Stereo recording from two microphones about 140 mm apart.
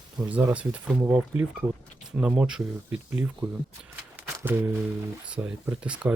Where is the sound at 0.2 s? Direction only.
10° right (ahead or behind).